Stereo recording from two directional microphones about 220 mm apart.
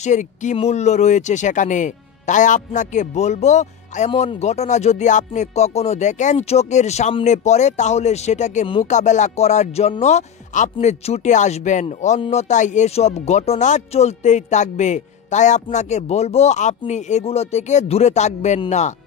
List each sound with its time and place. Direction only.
0.0 s speech: 35° left (ahead or behind)